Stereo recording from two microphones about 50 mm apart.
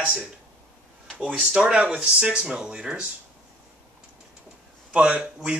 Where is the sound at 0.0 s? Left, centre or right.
Centre.